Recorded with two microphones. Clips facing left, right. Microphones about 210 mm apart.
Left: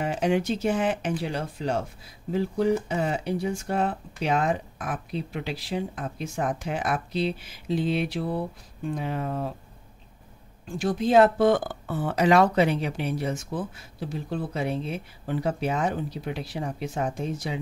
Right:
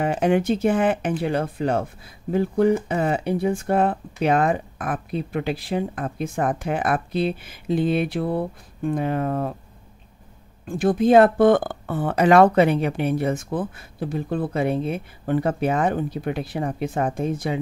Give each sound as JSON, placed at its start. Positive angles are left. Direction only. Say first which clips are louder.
{"t": 0.0, "sound": "speech", "louder": "right 5 dB", "side_deg": -55}
{"t": 10.7, "sound": "speech", "louder": "right 6 dB", "side_deg": -55}